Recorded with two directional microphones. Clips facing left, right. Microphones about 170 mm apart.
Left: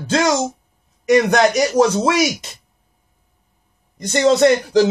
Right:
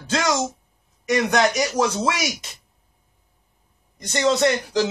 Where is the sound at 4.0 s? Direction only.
45° left (ahead or behind).